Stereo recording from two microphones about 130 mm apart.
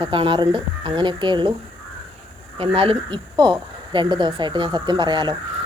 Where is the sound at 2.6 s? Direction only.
45° right (ahead or behind).